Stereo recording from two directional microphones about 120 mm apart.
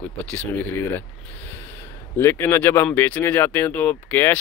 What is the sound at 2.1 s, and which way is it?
Speech, 20° left (ahead or behind).